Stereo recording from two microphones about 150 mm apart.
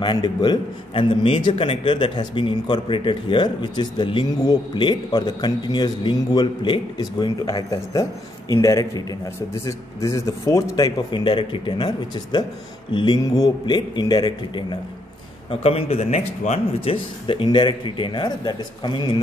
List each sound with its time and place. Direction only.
0.0 s a man's voice: 30° left (ahead or behind)
15.6 s a man's voice: 40° left (ahead or behind)